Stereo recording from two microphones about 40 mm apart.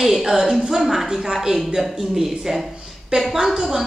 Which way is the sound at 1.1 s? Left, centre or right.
Centre.